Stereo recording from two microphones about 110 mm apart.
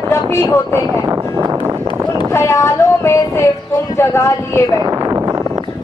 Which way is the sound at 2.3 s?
25° left (ahead or behind).